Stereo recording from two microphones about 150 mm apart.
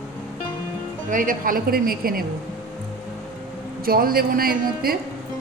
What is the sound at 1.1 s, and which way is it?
A woman's voice, 65° right (ahead or behind).